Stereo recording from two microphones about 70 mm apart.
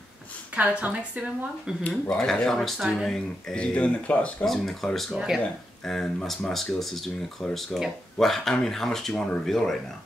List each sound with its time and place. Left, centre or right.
0.6 s a woman's voice: right
2.0 s speech: centre
3.5 s speech: centre
4.5 s speech: centre
5.1 s speech: centre
5.4 s speech: centre